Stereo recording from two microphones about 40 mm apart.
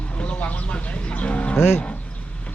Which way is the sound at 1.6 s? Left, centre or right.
Left.